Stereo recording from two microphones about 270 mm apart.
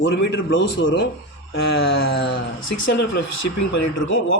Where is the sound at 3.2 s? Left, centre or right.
Left.